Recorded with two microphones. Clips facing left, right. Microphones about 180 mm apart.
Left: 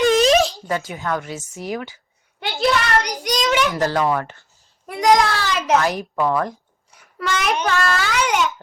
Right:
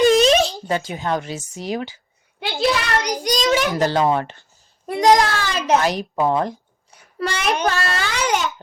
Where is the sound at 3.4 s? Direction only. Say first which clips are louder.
Even; 30° right (ahead or behind).